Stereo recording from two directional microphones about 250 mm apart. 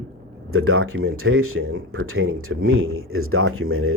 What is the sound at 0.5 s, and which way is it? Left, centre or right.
Speech, right.